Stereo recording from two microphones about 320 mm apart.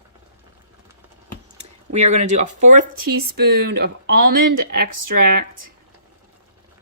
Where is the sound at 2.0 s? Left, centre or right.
Right.